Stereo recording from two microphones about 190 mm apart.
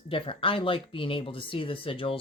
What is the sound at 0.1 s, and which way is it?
A woman's voice, 25° left (ahead or behind).